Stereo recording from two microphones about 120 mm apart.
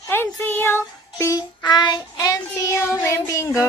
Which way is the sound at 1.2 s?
30° left (ahead or behind).